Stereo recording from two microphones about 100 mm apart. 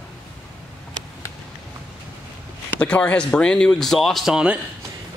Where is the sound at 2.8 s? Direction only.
15° left (ahead or behind); by 4.6 s 5° right (ahead or behind).